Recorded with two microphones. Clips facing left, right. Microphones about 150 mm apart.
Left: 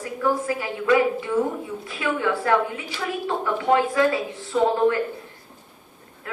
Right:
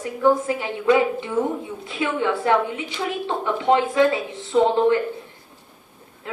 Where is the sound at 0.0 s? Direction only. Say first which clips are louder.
Right 5 dB; 25° right (ahead or behind).